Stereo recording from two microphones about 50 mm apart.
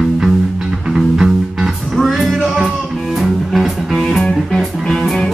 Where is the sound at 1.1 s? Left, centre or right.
Centre.